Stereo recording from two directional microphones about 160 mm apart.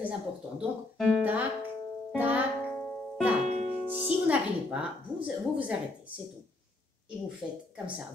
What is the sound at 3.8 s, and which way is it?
Music, 10° right (ahead or behind).